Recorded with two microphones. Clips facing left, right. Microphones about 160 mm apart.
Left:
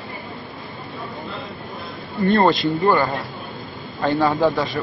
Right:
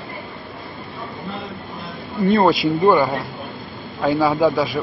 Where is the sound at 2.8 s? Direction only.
20° right (ahead or behind).